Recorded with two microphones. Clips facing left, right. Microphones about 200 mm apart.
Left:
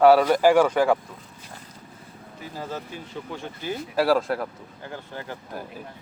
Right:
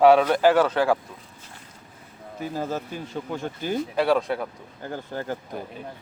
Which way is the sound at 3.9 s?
Centre (ahead or behind).